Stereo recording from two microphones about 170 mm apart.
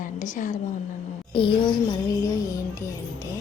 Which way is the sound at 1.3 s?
30° left (ahead or behind).